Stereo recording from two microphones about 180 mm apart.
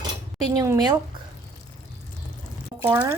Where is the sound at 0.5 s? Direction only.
20° right (ahead or behind).